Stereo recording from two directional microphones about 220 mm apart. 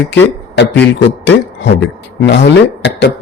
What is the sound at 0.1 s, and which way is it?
Speech, 55° left (ahead or behind).